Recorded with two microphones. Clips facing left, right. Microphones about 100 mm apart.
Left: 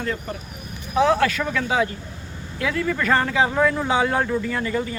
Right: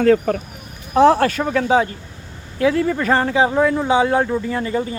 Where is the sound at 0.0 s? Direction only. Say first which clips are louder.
Right 13 dB; 90° right.